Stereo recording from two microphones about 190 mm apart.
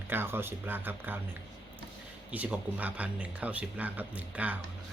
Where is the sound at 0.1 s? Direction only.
10° right (ahead or behind).